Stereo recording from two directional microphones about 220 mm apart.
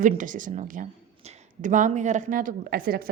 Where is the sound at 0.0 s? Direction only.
35° right (ahead or behind).